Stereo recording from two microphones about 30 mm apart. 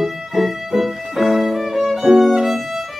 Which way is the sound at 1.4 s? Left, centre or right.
Centre.